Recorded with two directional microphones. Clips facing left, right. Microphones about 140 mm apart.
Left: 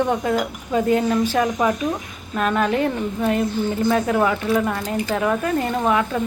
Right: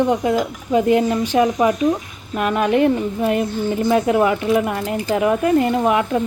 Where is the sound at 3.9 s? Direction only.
15° right (ahead or behind).